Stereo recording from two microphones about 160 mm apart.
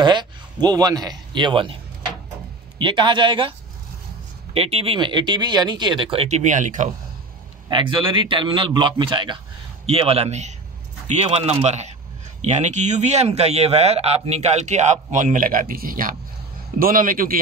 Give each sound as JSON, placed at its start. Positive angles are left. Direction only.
{"t": 0.0, "sound": "speech", "side_deg": -30}
{"t": 2.8, "sound": "speech", "side_deg": -30}
{"t": 4.6, "sound": "speech", "side_deg": -40}
{"t": 7.7, "sound": "a man's voice", "side_deg": -30}